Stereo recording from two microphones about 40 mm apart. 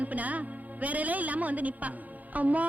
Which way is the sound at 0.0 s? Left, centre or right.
Right.